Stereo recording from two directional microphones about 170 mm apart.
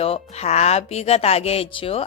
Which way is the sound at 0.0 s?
35° left (ahead or behind).